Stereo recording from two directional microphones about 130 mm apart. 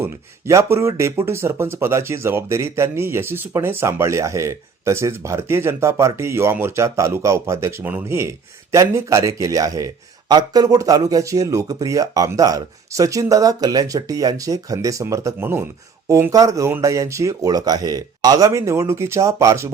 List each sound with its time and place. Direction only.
0.0 s speech: 20° right (ahead or behind)